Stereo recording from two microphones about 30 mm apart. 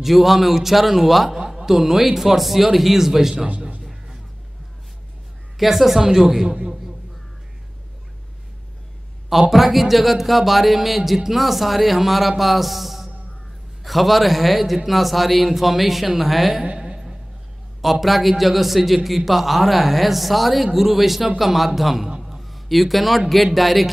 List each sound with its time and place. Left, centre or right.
0.0 s a man's voice: centre
5.6 s a man's voice: centre
6.4 s a man's voice: right
9.3 s speech: centre
16.7 s a sound: right
18.0 s a man's voice: centre